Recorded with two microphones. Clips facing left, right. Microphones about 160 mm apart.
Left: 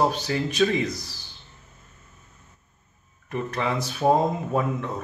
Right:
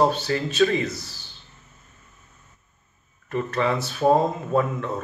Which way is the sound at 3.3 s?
15° left (ahead or behind).